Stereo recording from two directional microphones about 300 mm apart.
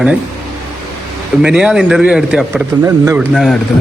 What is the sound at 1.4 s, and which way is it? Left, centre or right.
A man's voice, centre.